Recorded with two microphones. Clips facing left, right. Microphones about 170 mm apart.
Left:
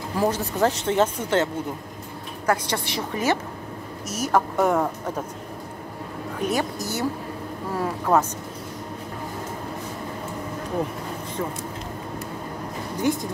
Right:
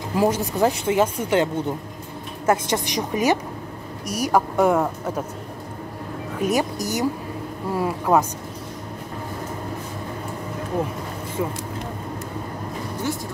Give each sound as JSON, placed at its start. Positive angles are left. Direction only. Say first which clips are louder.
{"t": 0.1, "sound": "a woman's voice", "louder": "right 3 dB", "side_deg": -15}
{"t": 6.4, "sound": "a woman's voice", "louder": "right 3 dB", "side_deg": -15}
{"t": 13.0, "sound": "speech", "louder": "left 5 dB", "side_deg": 20}